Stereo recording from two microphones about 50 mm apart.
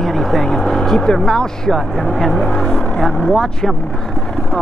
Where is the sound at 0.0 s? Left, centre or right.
Centre.